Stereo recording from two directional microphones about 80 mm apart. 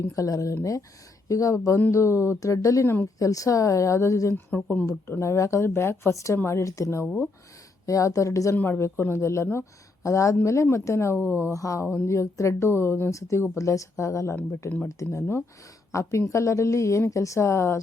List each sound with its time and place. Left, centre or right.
0.2 s speech: left
2.8 s speech: left
3.2 s speech: left
4.4 s speech: left
5.2 s speech: left
8.5 s speech: left